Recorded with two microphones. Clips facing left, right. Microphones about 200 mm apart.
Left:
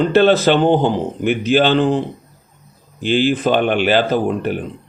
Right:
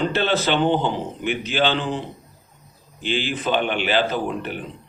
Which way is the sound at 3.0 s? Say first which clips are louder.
Left 9 dB; 50° left (ahead or behind).